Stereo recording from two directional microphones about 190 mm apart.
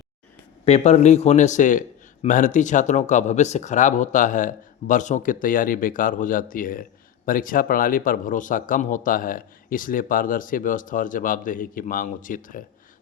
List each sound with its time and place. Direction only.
0.6 s speech: 35° left (ahead or behind)